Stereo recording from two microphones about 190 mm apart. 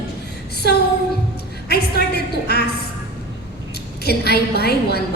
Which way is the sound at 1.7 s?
55° left (ahead or behind).